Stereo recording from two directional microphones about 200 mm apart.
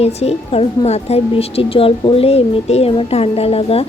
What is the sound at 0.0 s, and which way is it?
A woman's voice, 30° left (ahead or behind).